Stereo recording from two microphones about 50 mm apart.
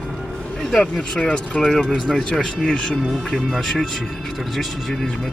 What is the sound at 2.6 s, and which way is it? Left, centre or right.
A man's voice, centre.